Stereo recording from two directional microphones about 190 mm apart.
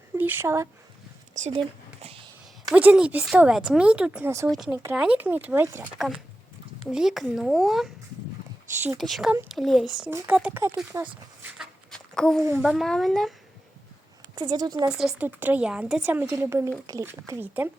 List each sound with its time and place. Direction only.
0.2 s speech: 10° right (ahead or behind)
1.5 s a sound: 30° right (ahead or behind)
2.6 s speech: 5° right (ahead or behind)
4.5 s a woman's voice: centre (ahead or behind)
6.9 s speech: centre (ahead or behind)
9.0 s speech: centre (ahead or behind)
9.3 s a woman's voice: 10° right (ahead or behind)
9.6 s a woman's voice: centre (ahead or behind)
10.9 s a sound: 10° right (ahead or behind)
12.5 s speech: 5° right (ahead or behind)
14.4 s speech: 20° right (ahead or behind)
14.8 s a woman's voice: 5° right (ahead or behind)